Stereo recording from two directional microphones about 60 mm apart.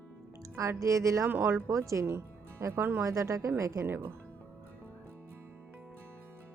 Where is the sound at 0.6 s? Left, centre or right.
Right.